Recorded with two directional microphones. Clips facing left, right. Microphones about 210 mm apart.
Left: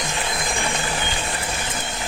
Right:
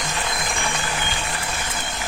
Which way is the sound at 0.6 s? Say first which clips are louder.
Left 2 dB; 30° left (ahead or behind).